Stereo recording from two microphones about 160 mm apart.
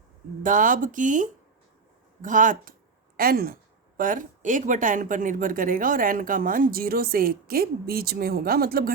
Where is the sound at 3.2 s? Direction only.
65° right (ahead or behind).